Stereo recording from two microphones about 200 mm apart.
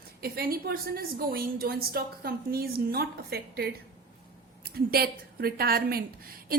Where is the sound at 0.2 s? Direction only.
50° right (ahead or behind).